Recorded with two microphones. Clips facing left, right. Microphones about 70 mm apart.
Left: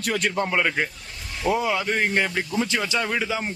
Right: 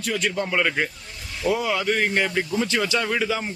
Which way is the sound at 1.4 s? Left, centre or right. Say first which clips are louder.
Even; left.